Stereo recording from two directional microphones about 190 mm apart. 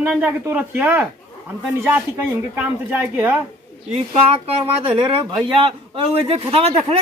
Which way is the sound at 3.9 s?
30° right (ahead or behind).